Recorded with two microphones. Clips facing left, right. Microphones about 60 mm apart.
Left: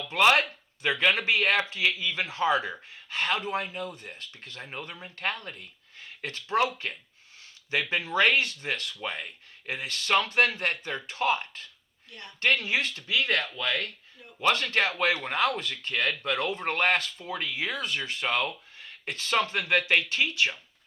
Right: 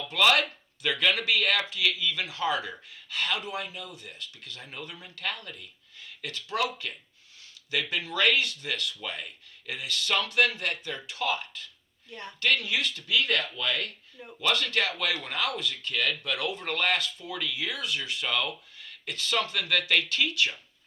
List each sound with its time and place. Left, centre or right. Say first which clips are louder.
0.1 s speech: left 2 dB; left